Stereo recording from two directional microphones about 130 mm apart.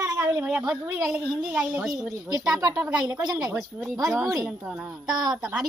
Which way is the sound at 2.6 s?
30° right (ahead or behind).